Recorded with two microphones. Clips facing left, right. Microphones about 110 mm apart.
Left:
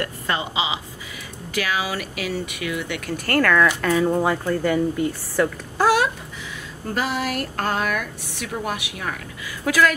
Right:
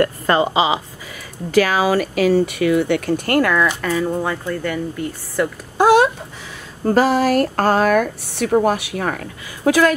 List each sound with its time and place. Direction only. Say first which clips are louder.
0.0 s a woman's voice: right 10 dB; 45° right (ahead or behind)
3.3 s speech: even; 15° right (ahead or behind)
3.8 s speech: left 1 dB; 5° left (ahead or behind)
5.8 s a sound: right 6 dB; 20° right (ahead or behind)
6.9 s speech: right 10 dB; 40° right (ahead or behind)
9.7 s speech: right 5 dB; 30° right (ahead or behind)